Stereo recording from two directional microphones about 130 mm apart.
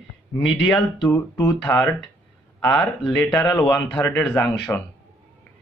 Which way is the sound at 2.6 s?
5° left (ahead or behind).